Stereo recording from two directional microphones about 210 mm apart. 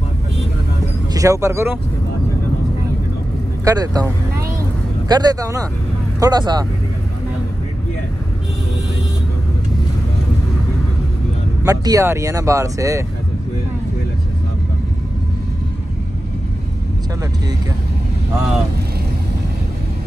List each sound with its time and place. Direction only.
1.1 s speech: 15° right (ahead or behind)
3.6 s speech: 15° right (ahead or behind)
11.6 s speech: 15° right (ahead or behind)